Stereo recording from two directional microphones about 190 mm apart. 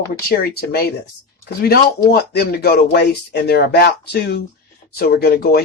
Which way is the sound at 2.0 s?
55° left (ahead or behind).